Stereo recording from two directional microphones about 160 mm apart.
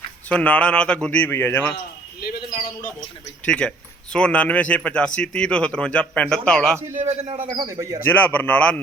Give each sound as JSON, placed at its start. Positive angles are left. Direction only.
{"t": 0.3, "sound": "speech", "side_deg": 5}
{"t": 2.2, "sound": "a sound", "side_deg": 70}
{"t": 3.4, "sound": "speech", "side_deg": 5}
{"t": 6.7, "sound": "a man's voice", "side_deg": -15}
{"t": 7.0, "sound": "speech", "side_deg": -40}
{"t": 7.5, "sound": "a man's voice", "side_deg": -25}
{"t": 8.0, "sound": "speech", "side_deg": 10}